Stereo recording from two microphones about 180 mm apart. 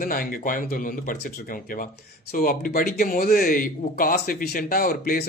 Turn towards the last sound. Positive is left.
turn(degrees=55)  # may be behind; listen again after turning